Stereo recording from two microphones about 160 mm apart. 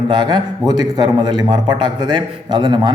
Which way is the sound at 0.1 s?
30° right (ahead or behind).